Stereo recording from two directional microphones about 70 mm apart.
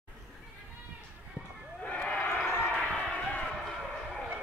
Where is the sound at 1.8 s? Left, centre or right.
Left.